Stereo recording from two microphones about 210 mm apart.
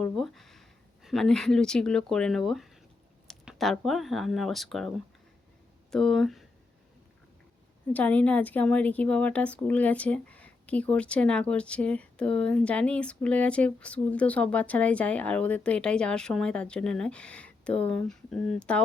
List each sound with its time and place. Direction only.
0.0 s a woman's voice: centre (ahead or behind)
5.9 s a woman's voice: centre (ahead or behind)
7.9 s a woman's voice: 5° left (ahead or behind)